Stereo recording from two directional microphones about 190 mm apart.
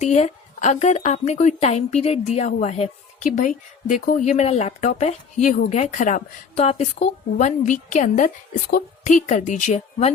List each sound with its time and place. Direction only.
0.0 s a woman's voice: 35° left (ahead or behind)